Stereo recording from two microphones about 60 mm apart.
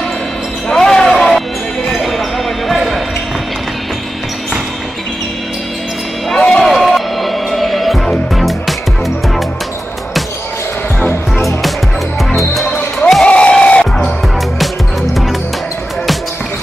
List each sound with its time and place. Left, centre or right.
0.7 s basketball bounce: centre
6.3 s a sound: centre
6.6 s music: centre
13.2 s crowd: centre